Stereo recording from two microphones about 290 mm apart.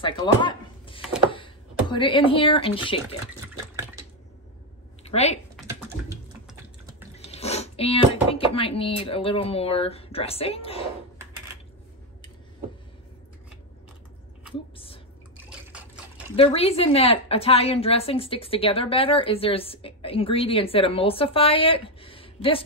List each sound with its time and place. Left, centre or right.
0.0 s a sound: centre
1.3 s speech: centre
5.0 s speech: left
7.2 s a woman's voice: left
16.3 s a woman's voice: centre